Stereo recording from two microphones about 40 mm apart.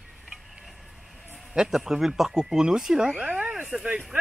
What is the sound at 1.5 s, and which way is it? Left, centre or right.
Speech, centre.